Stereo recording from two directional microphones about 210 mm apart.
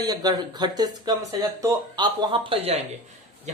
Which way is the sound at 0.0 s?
20° right (ahead or behind).